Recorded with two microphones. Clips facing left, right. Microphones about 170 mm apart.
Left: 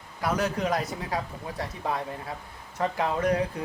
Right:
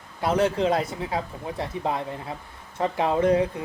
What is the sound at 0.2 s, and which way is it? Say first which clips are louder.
Speech: right 5 dB; 30° right (ahead or behind).